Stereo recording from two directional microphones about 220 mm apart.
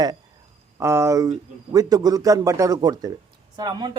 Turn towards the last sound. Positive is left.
turn(degrees=-20)  # may be behind; listen again after turning